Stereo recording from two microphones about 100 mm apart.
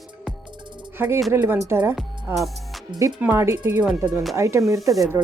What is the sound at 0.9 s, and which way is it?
Speech, 20° right (ahead or behind).